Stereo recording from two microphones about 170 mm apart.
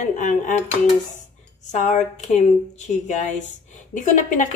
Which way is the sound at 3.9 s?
50° left (ahead or behind).